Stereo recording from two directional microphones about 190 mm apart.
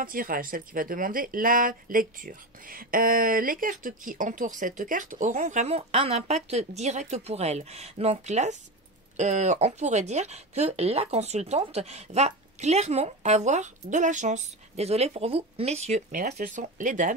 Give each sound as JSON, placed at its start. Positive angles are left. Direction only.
{"t": 0.0, "sound": "speech", "side_deg": -50}